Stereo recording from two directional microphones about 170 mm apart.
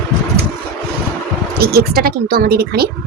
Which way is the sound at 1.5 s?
65° right (ahead or behind).